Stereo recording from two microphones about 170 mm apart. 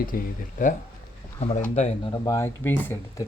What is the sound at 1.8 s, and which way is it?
Speech, 35° left (ahead or behind).